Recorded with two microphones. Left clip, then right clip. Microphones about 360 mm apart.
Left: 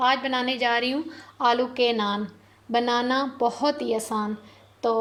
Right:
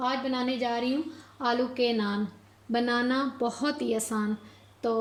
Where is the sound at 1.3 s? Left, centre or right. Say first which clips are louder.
Left 6 dB; left.